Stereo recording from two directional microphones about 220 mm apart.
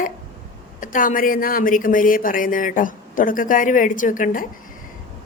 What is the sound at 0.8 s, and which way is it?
Speech, 40° left (ahead or behind).